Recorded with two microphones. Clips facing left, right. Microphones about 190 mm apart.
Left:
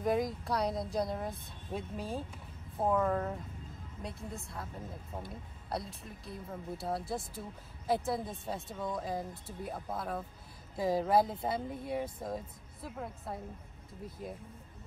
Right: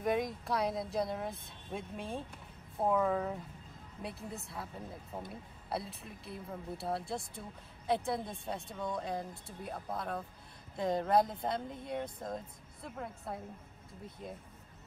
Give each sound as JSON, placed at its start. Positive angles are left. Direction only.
{"t": 0.0, "sound": "speech", "side_deg": 0}